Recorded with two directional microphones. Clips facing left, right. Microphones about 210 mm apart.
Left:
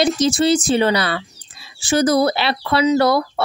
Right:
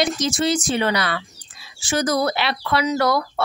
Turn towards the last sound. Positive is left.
turn(degrees=30)  # may be behind; listen again after turning